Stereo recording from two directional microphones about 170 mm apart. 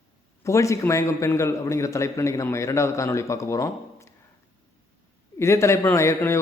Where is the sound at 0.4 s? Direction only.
15° left (ahead or behind).